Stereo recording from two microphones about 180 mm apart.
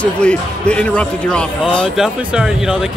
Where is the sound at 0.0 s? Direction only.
5° left (ahead or behind).